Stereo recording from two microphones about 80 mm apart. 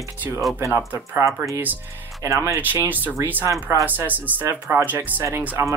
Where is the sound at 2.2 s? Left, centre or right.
Right.